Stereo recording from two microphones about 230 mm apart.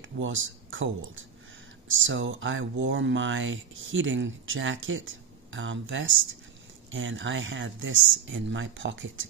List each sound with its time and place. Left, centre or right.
0.2 s speech: right